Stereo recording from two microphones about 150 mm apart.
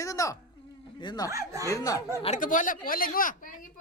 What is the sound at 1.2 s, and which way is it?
Speech, 20° right (ahead or behind).